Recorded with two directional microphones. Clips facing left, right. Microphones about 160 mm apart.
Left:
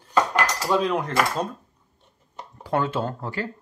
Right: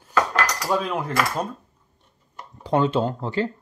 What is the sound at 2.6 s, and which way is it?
Speech, 20° right (ahead or behind).